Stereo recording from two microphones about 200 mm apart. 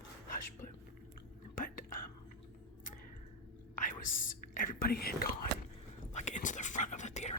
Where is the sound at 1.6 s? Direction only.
45° left (ahead or behind).